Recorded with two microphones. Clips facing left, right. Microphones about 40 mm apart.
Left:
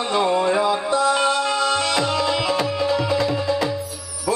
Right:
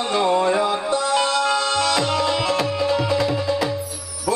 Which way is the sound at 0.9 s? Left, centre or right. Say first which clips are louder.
Left 1 dB; centre.